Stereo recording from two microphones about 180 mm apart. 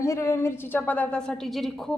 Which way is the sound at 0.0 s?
15° left (ahead or behind).